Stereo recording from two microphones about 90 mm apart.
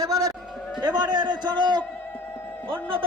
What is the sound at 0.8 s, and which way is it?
Speech, 55° right (ahead or behind).